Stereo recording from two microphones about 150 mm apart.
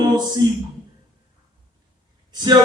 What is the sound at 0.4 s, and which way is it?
Speech, 25° right (ahead or behind).